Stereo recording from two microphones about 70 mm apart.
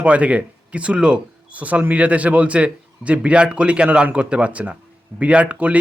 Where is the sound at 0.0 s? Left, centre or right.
Centre.